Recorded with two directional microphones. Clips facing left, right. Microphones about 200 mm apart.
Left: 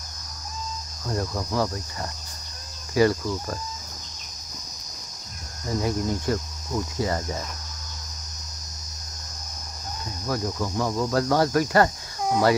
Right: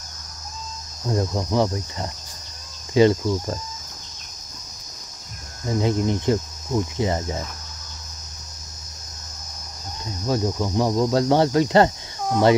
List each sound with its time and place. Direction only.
1.0 s speech: 25° right (ahead or behind)
5.7 s speech: 20° right (ahead or behind)
10.2 s speech: 25° right (ahead or behind)